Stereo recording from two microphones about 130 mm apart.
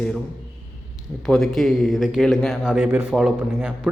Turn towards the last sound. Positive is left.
turn(degrees=-10)  # may be behind; listen again after turning